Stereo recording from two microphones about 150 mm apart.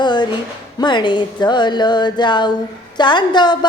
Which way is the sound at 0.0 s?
30° left (ahead or behind).